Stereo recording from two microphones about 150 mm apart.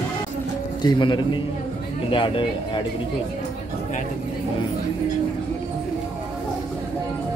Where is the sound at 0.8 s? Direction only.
30° left (ahead or behind).